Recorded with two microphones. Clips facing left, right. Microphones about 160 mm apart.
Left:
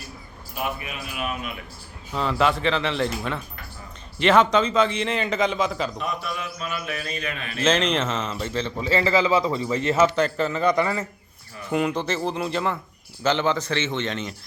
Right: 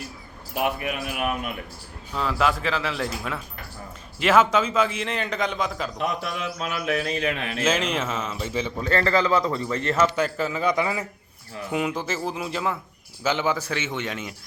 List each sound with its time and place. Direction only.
0.5 s speech: 70° right (ahead or behind)
2.1 s a man's voice: centre (ahead or behind)
6.0 s a man's voice: 90° right
7.6 s a man's voice: 5° right (ahead or behind)
8.8 s a man's voice: 5° left (ahead or behind)
10.2 s a man's voice: 5° right (ahead or behind)